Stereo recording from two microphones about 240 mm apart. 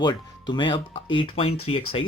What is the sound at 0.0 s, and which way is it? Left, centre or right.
Speech, centre.